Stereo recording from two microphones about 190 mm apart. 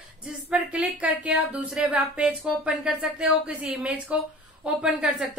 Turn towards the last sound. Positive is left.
turn(degrees=-5)  # may be behind; listen again after turning